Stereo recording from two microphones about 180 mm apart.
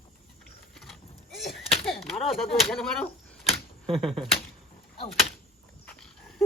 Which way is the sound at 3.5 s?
Centre (ahead or behind).